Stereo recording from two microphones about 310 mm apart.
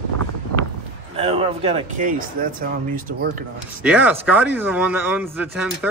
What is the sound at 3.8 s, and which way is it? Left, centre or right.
Speech, centre.